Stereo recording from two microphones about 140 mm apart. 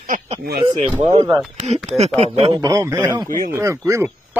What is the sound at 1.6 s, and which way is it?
Speech, 55° right (ahead or behind).